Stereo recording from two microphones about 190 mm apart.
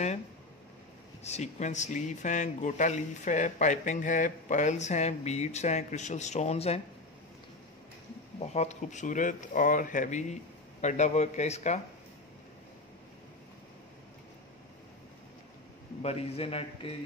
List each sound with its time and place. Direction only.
1.2 s speech: 35° left (ahead or behind)
8.4 s speech: 35° left (ahead or behind)
16.0 s speech: 35° left (ahead or behind)